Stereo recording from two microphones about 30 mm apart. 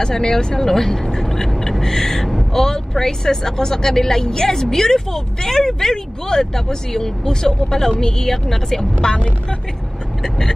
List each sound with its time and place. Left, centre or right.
0.0 s speech: left
0.6 s speech: centre
1.2 s a sound: centre
2.5 s speech: centre
9.0 s speech: left